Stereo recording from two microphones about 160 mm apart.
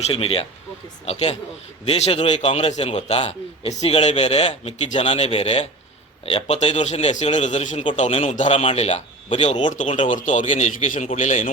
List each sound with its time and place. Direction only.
0.0 s a man's voice: 35° left (ahead or behind)
9.7 s a man's voice: 50° left (ahead or behind)